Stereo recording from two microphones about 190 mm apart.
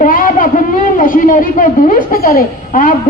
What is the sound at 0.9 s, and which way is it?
A woman's voice, 45° left (ahead or behind).